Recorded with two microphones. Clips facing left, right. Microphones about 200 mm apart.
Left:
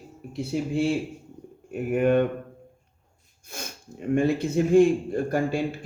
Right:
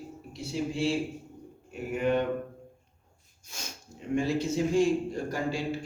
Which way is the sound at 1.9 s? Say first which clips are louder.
Left 6 dB; 55° left (ahead or behind).